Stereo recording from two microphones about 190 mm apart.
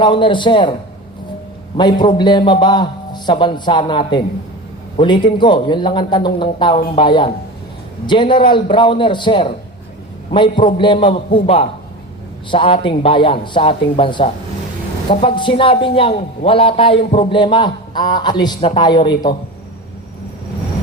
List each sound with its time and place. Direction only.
0.0 s a man's voice: 25° left (ahead or behind)
1.7 s a man's voice: 25° left (ahead or behind)